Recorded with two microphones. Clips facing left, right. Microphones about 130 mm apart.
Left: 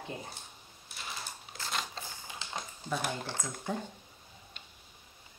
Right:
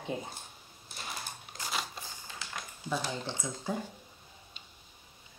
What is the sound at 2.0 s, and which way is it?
Typewriter, 15° left (ahead or behind).